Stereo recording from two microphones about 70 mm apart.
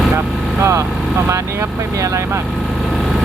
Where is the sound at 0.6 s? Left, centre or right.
Right.